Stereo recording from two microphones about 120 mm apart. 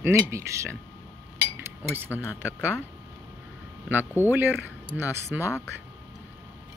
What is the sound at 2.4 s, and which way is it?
Speech, 15° right (ahead or behind).